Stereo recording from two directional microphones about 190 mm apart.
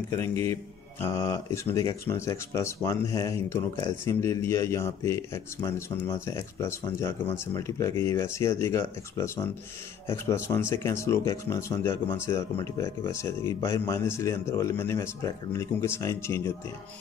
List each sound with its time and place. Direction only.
0.1 s speech: 15° left (ahead or behind)